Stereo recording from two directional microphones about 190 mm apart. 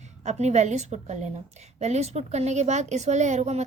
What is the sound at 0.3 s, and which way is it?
A woman's voice, 35° right (ahead or behind).